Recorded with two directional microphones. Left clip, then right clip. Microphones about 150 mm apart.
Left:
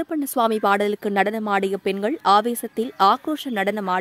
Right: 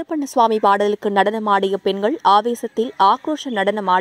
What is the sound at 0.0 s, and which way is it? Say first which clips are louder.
A woman's voice: right 5 dB; 15° left (ahead or behind).